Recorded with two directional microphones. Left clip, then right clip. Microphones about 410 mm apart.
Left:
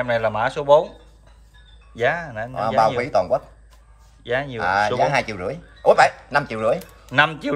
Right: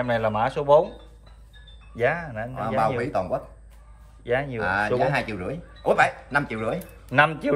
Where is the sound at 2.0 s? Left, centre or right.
Centre.